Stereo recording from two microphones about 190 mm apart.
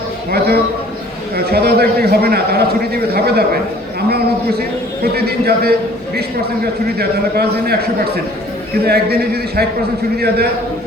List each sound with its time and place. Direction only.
0.3 s a man's voice: 55° right (ahead or behind)
5.1 s a man's voice: 55° right (ahead or behind)
7.0 s a man's voice: 55° right (ahead or behind)